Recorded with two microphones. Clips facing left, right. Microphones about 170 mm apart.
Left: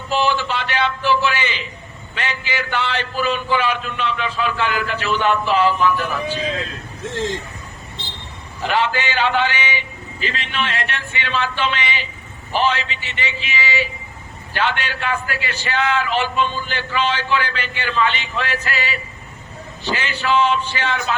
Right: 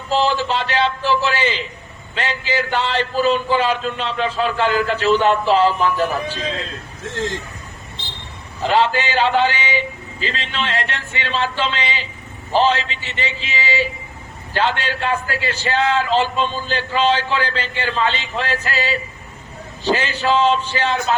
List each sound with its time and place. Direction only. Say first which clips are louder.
0.2 s a man's voice: right 1 dB; 30° right (ahead or behind)
8.6 s a man's voice: right 3 dB; 30° right (ahead or behind)